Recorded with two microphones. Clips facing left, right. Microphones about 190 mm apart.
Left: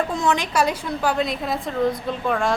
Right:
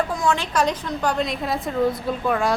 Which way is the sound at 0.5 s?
10° left (ahead or behind).